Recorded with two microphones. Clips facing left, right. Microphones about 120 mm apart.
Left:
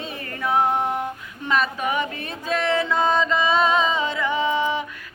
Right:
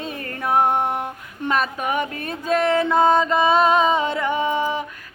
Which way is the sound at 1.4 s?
50° right (ahead or behind).